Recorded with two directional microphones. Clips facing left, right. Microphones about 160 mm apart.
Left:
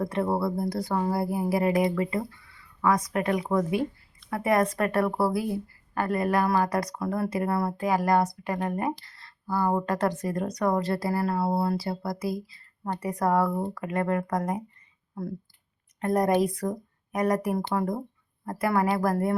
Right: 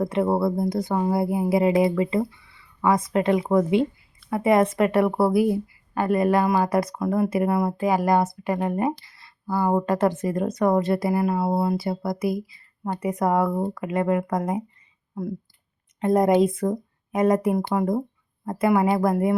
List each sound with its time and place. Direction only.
0.0 s a woman's voice: 20° right (ahead or behind)
16.0 s a woman's voice: 20° right (ahead or behind)